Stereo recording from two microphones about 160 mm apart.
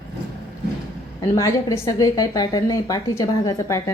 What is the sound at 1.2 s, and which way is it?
A woman's voice, 20° left (ahead or behind).